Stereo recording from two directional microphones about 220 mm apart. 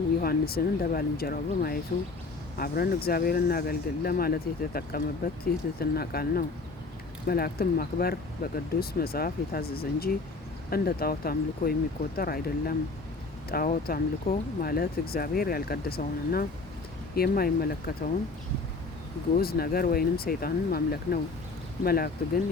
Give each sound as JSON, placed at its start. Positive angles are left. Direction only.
{"t": 0.2, "sound": "speech", "side_deg": 45}
{"t": 19.4, "sound": "speech", "side_deg": 45}